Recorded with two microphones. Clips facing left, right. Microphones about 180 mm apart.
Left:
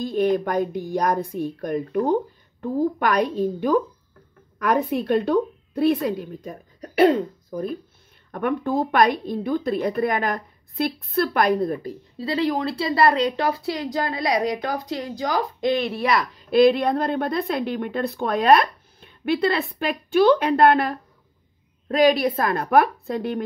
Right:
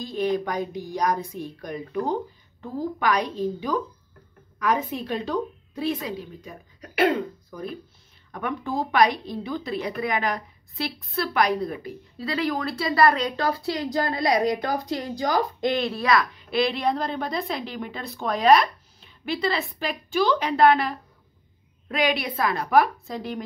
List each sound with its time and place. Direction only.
0.0 s a woman's voice: 50° left (ahead or behind)
8.3 s a woman's voice: 55° left (ahead or behind)
12.2 s a woman's voice: 30° left (ahead or behind)
13.7 s a woman's voice: 5° left (ahead or behind)
15.9 s a woman's voice: 30° left (ahead or behind)
16.4 s a woman's voice: 50° left (ahead or behind)
21.8 s a woman's voice: 40° left (ahead or behind)